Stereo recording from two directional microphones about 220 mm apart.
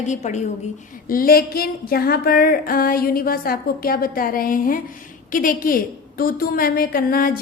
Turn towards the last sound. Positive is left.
turn(degrees=40)  # may be behind; listen again after turning